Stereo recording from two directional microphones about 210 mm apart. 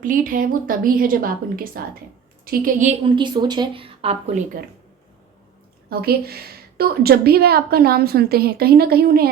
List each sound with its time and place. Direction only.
0.0 s a woman's voice: 40° right (ahead or behind)
3.2 s speech: 20° right (ahead or behind)
5.9 s a woman's voice: 45° right (ahead or behind)